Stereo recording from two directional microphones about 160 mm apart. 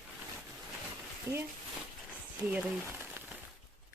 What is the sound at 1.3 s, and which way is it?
Speech, 20° right (ahead or behind).